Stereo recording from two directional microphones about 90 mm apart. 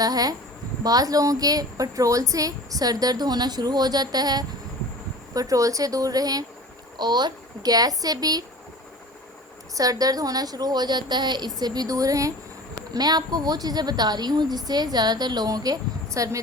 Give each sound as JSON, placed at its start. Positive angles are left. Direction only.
{"t": 0.0, "sound": "a woman's voice", "side_deg": -45}
{"t": 9.7, "sound": "a woman's voice", "side_deg": -40}